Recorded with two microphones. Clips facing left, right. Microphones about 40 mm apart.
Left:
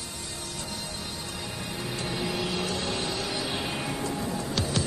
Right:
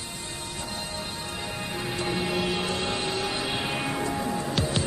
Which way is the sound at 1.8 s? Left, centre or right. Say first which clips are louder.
Right 3 dB; right.